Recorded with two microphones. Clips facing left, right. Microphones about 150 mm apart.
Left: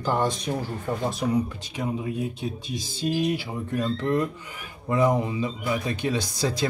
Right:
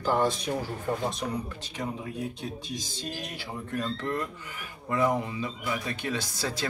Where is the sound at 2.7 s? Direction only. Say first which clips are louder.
Left 9 dB; 10° left (ahead or behind).